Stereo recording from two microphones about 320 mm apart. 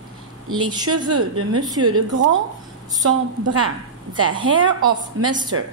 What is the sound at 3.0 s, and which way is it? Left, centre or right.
A woman's voice, right.